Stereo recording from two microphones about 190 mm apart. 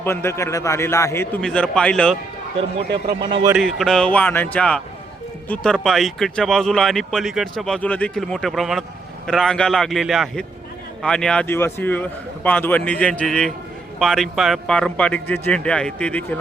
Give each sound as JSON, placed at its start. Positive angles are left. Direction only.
{"t": 0.0, "sound": "a man's voice", "side_deg": 15}
{"t": 2.6, "sound": "a man's voice", "side_deg": -30}
{"t": 3.5, "sound": "a man's voice", "side_deg": 0}